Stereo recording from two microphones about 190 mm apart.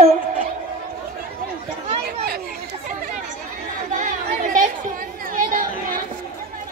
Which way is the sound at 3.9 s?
45° right (ahead or behind).